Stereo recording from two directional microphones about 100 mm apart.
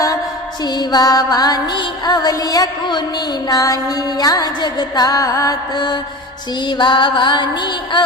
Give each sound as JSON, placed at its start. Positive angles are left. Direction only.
{"t": 0.7, "sound": "music", "side_deg": 45}